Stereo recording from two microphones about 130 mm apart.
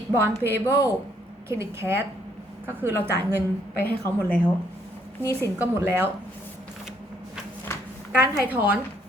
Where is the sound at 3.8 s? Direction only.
15° left (ahead or behind).